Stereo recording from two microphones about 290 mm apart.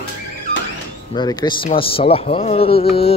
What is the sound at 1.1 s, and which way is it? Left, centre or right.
Speech, centre.